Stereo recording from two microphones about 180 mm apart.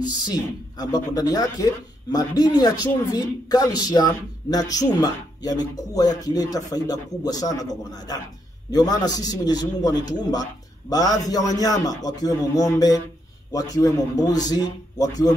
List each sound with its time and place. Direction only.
0.1 s a man's voice: 20° left (ahead or behind)